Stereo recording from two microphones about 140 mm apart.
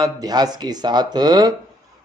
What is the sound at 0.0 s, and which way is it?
Speech, 25° right (ahead or behind).